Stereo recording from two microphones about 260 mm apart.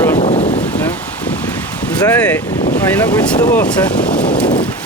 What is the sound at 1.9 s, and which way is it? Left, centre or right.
Speech, centre.